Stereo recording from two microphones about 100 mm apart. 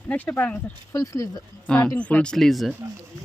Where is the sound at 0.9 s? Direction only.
35° left (ahead or behind).